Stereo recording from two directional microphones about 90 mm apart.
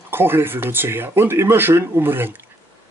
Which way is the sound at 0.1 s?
25° right (ahead or behind).